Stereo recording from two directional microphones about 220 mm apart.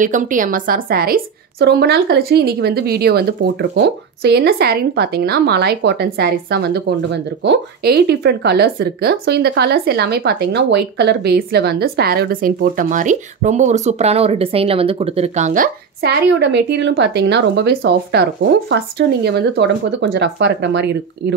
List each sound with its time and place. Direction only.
0.0 s a woman's voice: 35° right (ahead or behind); by 21.4 s 50° right (ahead or behind)